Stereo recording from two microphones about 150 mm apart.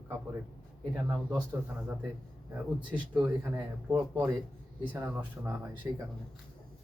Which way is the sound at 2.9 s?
10° right (ahead or behind).